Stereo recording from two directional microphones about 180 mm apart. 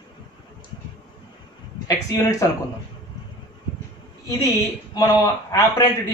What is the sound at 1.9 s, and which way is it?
Speech, 20° left (ahead or behind).